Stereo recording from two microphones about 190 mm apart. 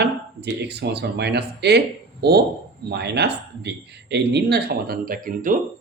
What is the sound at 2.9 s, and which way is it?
Speech, 60° right (ahead or behind).